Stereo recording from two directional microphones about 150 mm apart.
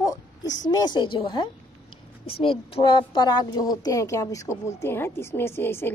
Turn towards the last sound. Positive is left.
turn(degrees=15)  # may be behind; listen again after turning